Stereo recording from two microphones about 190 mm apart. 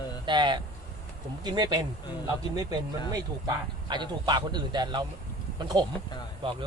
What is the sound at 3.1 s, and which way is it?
A man's voice, 25° right (ahead or behind).